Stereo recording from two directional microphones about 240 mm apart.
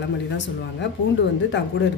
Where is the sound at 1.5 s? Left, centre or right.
Left.